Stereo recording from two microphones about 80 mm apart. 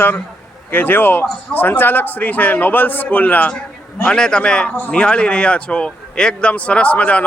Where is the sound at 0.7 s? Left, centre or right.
Left.